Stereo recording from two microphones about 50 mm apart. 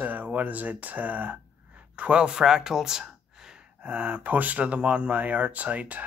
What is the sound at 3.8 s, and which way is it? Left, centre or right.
Speech, right.